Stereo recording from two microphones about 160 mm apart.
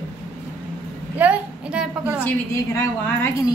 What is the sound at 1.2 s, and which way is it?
A woman's voice, 10° right (ahead or behind).